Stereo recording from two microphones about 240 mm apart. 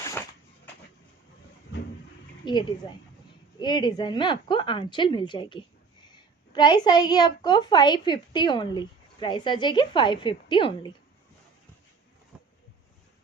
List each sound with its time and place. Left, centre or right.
2.4 s a woman's voice: centre